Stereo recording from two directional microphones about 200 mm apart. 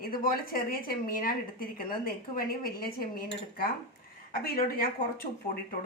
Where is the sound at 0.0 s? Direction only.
45° left (ahead or behind).